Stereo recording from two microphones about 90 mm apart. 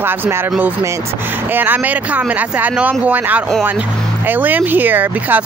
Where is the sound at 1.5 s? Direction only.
20° right (ahead or behind).